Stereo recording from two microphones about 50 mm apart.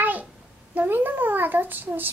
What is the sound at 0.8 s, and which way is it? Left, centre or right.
A child's voice, right.